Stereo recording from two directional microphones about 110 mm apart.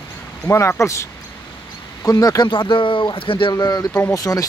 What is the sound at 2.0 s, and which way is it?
Speech, 35° left (ahead or behind).